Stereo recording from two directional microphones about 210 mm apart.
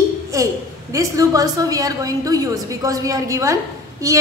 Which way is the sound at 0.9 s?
15° right (ahead or behind).